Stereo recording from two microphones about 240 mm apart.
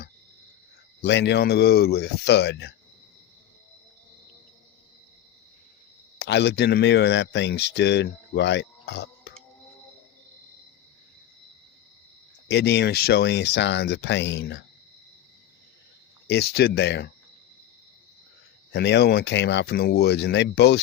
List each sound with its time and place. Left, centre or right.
1.0 s speech: left
6.1 s speech: left
12.5 s speech: left
16.2 s speech: left
18.7 s speech: left